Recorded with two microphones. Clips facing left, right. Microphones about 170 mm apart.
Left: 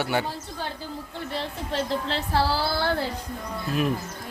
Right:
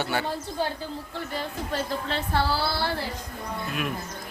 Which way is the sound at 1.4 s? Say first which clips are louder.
Left 2 dB; 30° left (ahead or behind).